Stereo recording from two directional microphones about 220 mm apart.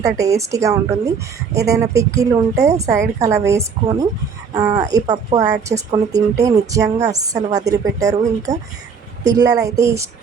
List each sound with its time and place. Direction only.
0.0 s speech: 15° right (ahead or behind)